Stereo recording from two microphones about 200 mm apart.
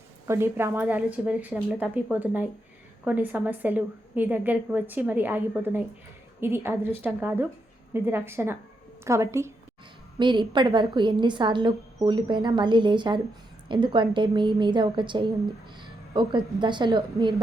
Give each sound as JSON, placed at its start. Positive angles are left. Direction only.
{"t": 0.3, "sound": "a woman's voice", "side_deg": -10}